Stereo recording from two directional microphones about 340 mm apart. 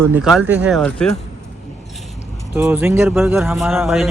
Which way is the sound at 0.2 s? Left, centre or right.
Centre.